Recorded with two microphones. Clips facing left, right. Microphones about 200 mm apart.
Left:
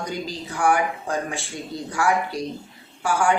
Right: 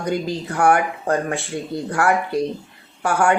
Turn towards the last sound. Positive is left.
turn(degrees=-60)  # may be behind; listen again after turning